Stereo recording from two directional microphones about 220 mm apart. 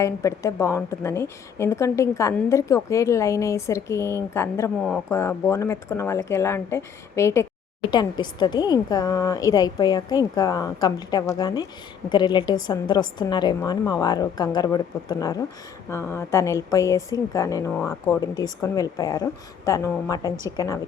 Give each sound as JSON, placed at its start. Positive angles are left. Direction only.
{"t": 0.0, "sound": "a woman's voice", "side_deg": 15}